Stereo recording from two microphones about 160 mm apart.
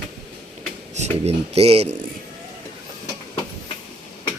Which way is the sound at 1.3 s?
40° right (ahead or behind).